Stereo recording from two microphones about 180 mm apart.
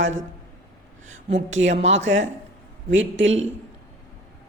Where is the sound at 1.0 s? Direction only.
90° right.